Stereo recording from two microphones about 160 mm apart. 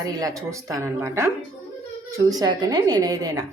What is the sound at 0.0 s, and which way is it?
A woman's voice, 20° right (ahead or behind).